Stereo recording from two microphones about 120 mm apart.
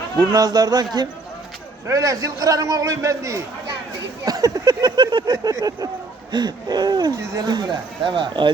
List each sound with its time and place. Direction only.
0.2 s speech: 35° right (ahead or behind)
1.9 s a man's voice: 30° right (ahead or behind)